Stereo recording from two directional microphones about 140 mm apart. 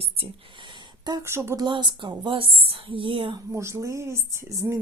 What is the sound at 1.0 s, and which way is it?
Speech, 30° right (ahead or behind).